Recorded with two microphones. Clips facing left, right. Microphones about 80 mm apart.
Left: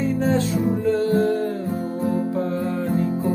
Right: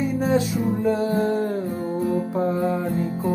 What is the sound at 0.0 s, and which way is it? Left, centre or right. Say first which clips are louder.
Music: even; centre.